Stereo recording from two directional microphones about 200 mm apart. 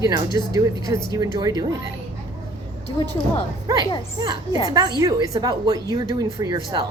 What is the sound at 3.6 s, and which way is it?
A woman's voice, 20° right (ahead or behind).